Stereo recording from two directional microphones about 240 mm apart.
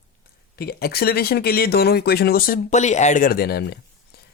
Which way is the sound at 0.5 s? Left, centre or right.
Left.